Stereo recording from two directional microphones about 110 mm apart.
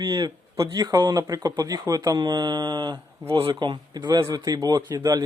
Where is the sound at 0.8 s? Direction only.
40° right (ahead or behind).